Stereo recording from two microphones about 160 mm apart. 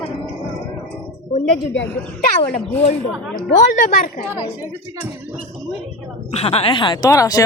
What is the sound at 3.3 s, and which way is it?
A woman's voice, 60° left (ahead or behind).